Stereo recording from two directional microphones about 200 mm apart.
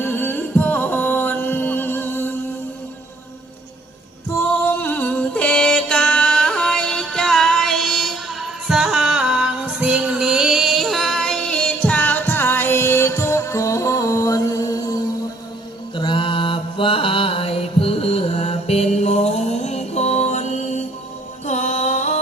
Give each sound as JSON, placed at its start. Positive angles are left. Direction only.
{"t": 0.0, "sound": "music", "side_deg": 10}
{"t": 4.6, "sound": "music", "side_deg": 10}
{"t": 16.0, "sound": "mantra", "side_deg": 25}
{"t": 21.4, "sound": "music", "side_deg": 35}